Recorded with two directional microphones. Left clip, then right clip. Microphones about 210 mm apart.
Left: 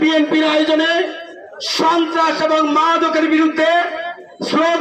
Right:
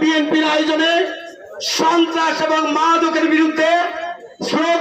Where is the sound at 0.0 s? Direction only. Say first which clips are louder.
Left 1 dB; 15° left (ahead or behind).